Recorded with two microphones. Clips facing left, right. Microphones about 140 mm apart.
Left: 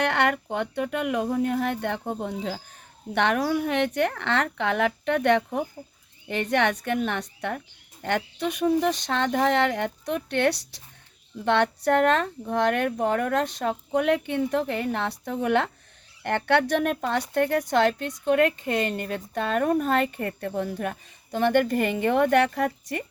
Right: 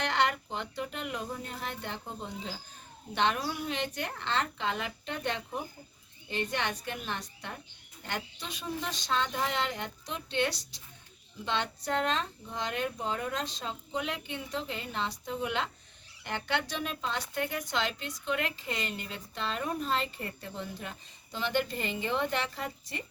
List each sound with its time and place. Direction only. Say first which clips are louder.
0.0 s speech: left 6 dB; 60° left (ahead or behind)